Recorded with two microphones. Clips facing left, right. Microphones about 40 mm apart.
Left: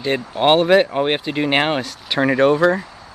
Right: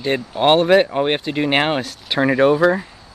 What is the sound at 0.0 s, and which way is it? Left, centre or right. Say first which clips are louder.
Speech: even; centre.